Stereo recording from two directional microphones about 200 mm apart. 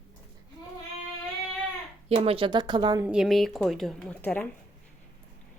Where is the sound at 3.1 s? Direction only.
Centre (ahead or behind).